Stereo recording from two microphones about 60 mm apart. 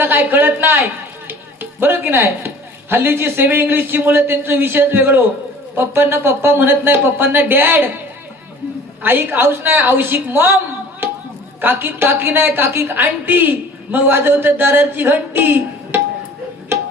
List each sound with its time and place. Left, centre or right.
0.0 s a woman's voice: right
9.0 s a woman's voice: right
11.0 s chop: right
11.6 s a woman's voice: right